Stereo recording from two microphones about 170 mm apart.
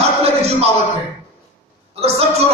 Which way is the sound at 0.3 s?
35° right (ahead or behind).